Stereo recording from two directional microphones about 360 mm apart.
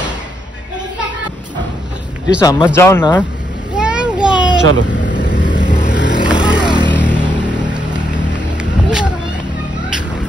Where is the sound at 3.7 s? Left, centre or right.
Centre.